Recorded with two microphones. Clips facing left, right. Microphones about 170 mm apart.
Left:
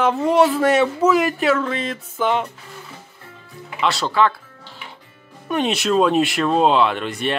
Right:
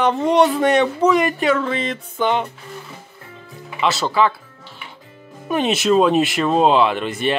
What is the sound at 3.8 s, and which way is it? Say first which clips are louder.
Speech: right 1 dB; centre (ahead or behind).